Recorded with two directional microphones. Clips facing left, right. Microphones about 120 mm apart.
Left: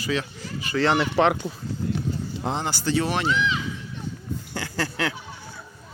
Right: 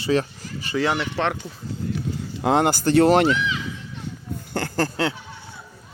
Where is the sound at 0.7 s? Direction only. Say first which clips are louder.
Left 1 dB; 10° right (ahead or behind).